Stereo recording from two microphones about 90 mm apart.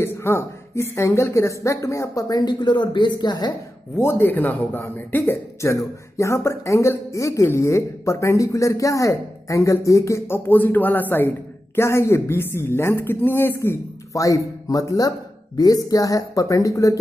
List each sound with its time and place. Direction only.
0.0 s a man's voice: 30° left (ahead or behind); by 3.5 s 50° left (ahead or behind)
3.9 s a man's voice: 25° left (ahead or behind)